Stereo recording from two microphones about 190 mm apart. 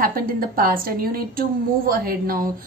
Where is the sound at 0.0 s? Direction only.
50° right (ahead or behind).